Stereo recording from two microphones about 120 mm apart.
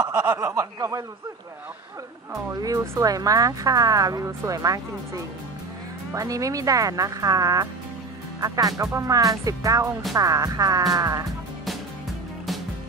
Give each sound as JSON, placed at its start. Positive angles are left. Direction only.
{"t": 0.0, "sound": "speech", "side_deg": -30}
{"t": 2.3, "sound": "speech", "side_deg": -30}